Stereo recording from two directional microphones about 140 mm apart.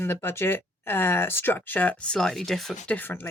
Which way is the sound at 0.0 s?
15° left (ahead or behind).